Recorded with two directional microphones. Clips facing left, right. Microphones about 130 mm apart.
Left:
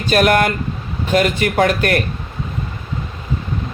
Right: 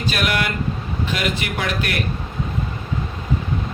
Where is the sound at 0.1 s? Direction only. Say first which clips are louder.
Left 9 dB; 45° left (ahead or behind).